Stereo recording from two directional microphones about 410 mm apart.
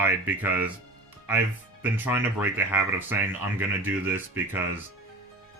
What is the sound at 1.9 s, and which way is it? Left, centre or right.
Speech, centre.